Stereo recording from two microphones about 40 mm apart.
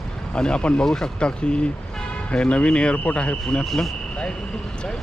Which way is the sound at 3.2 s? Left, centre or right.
Left.